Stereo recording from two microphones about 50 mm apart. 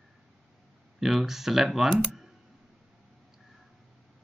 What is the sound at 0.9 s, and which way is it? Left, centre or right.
Speech, centre.